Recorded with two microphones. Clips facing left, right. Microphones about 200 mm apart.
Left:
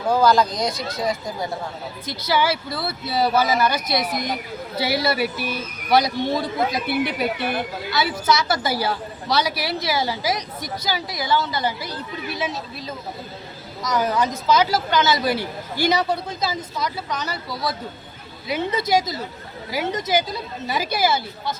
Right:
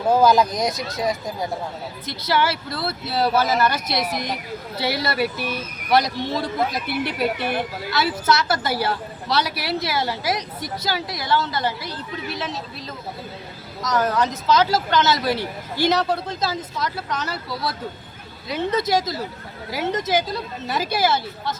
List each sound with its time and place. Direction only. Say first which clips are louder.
0.1 s speech: right 1 dB; 20° right (ahead or behind)
2.0 s a woman's voice: left 1 dB; centre (ahead or behind)
4.8 s a woman's voice: left 1 dB; 5° left (ahead or behind)
13.8 s a woman's voice: even; centre (ahead or behind)
18.4 s a woman's voice: right 1 dB; centre (ahead or behind)